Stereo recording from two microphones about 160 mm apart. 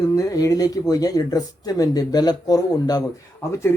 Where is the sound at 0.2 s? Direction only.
20° left (ahead or behind).